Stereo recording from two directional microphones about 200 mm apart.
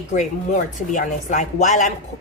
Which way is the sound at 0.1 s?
40° left (ahead or behind).